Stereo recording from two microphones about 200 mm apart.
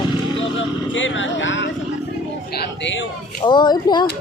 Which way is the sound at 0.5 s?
70° left (ahead or behind).